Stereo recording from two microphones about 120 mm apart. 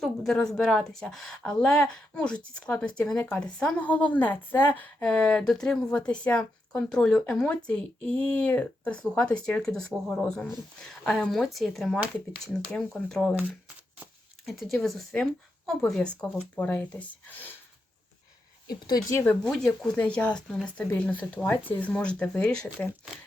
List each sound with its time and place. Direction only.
0.0 s a woman's voice: 5° left (ahead or behind)
14.4 s a woman's voice: centre (ahead or behind); by 17.5 s 15° left (ahead or behind)
18.7 s speech: 30° left (ahead or behind)
19.5 s a woman's voice: 5° left (ahead or behind)